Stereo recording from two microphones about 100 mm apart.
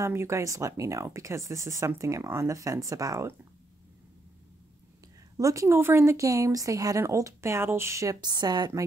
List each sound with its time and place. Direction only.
0.0 s speech: 30° right (ahead or behind)
5.4 s speech: 35° right (ahead or behind)
8.2 s a woman's voice: 45° right (ahead or behind)